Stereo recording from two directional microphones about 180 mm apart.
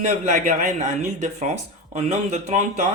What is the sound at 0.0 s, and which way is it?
A man's voice, 45° right (ahead or behind).